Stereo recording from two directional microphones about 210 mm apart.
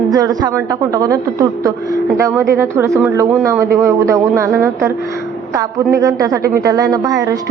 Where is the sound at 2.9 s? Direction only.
Centre (ahead or behind).